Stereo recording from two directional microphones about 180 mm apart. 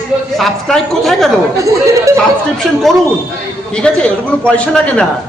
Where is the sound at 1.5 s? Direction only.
15° right (ahead or behind).